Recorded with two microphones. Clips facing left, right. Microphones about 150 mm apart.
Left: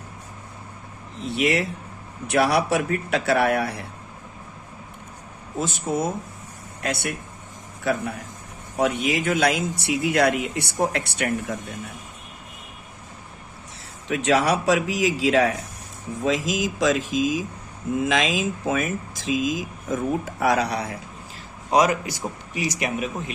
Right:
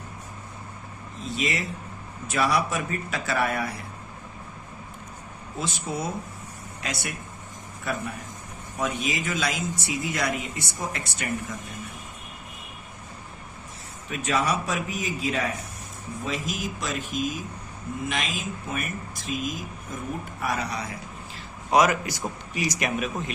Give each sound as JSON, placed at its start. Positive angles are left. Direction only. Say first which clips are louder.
{"t": 1.2, "sound": "speech", "louder": "left 7 dB", "side_deg": 65}
{"t": 5.5, "sound": "speech", "louder": "left 6 dB", "side_deg": 45}
{"t": 6.8, "sound": "speech", "louder": "left 6 dB", "side_deg": 65}
{"t": 7.9, "sound": "speech", "louder": "left 7 dB", "side_deg": 80}
{"t": 8.8, "sound": "speech", "louder": "left 6 dB", "side_deg": 65}
{"t": 14.1, "sound": "speech", "louder": "left 6 dB", "side_deg": 75}
{"t": 21.7, "sound": "a man's voice", "louder": "left 1 dB", "side_deg": 30}
{"t": 22.5, "sound": "speech", "louder": "left 1 dB", "side_deg": 20}